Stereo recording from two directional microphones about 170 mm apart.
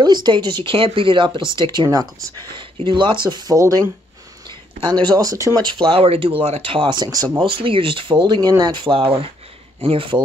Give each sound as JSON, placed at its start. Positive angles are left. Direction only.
{"t": 0.0, "sound": "speech", "side_deg": -25}
{"t": 5.9, "sound": "speech", "side_deg": -35}